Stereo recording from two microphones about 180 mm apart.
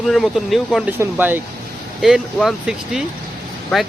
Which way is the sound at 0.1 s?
Centre (ahead or behind).